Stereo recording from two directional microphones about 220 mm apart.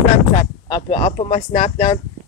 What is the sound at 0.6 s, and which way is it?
Speech, 25° left (ahead or behind).